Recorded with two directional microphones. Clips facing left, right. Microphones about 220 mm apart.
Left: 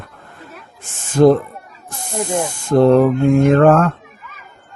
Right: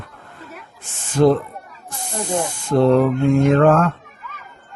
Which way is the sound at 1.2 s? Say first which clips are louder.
Left 4 dB; 45° left (ahead or behind).